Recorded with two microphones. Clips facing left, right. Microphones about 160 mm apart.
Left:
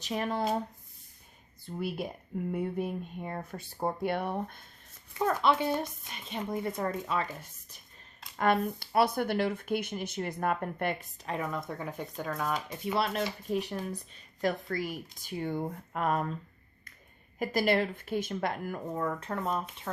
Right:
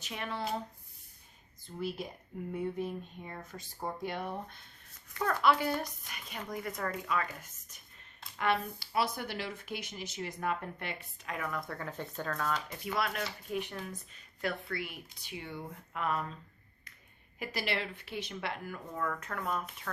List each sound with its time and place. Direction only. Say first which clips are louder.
0.0 s speech: left 7 dB; 40° left (ahead or behind)
2.5 s speech: left 2 dB; 55° left (ahead or behind)
5.1 s speech: left 2 dB; 20° left (ahead or behind)
8.4 s speech: left 5 dB; 50° left (ahead or behind)
11.3 s speech: left 4 dB; 25° left (ahead or behind); by 16.4 s 45° left (ahead or behind)
17.4 s speech: left 9 dB; 45° left (ahead or behind)
19.0 s speech: left 2 dB; 30° left (ahead or behind)